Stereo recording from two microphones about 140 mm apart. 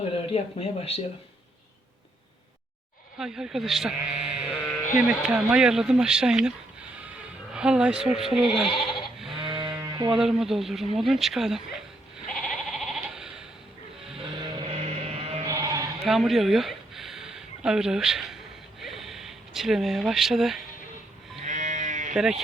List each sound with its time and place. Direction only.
0.3 s speech: 45° left (ahead or behind)
3.2 s speech: 5° right (ahead or behind)
7.5 s speech: 5° right (ahead or behind)
9.4 s a sound: 35° right (ahead or behind)
10.1 s speech: 5° right (ahead or behind)
12.3 s goat: centre (ahead or behind)
14.2 s sheep: 40° right (ahead or behind)
15.4 s sheep: 25° right (ahead or behind)
16.0 s speech: centre (ahead or behind)
18.8 s a sound: centre (ahead or behind)
21.4 s sheep: 60° right (ahead or behind)
22.1 s speech: 5° right (ahead or behind)